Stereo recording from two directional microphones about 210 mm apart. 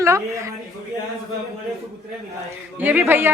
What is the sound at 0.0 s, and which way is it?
Speech, 15° right (ahead or behind).